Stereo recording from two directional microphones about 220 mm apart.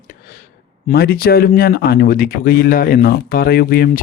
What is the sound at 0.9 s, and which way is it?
Speech, 45° left (ahead or behind).